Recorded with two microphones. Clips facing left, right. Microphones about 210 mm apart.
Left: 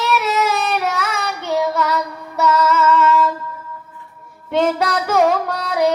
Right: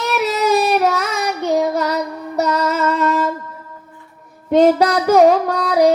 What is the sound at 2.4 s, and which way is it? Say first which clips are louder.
Music: left 2 dB; 35° right (ahead or behind).